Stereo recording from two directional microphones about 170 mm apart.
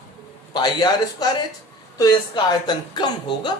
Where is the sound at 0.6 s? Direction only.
25° left (ahead or behind).